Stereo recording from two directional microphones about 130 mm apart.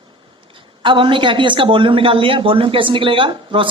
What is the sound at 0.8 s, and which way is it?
Speech, 40° right (ahead or behind).